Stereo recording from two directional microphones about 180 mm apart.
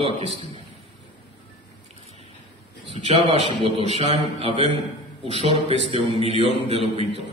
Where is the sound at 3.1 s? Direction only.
35° right (ahead or behind).